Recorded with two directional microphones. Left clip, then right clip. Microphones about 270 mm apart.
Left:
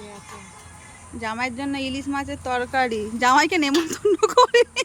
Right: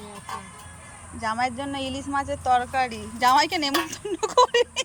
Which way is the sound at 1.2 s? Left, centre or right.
Centre.